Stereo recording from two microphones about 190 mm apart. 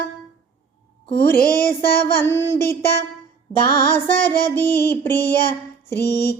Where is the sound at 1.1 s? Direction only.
55° left (ahead or behind).